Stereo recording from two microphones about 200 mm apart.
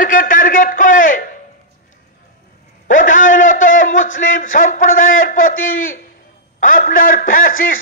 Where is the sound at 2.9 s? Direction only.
40° left (ahead or behind).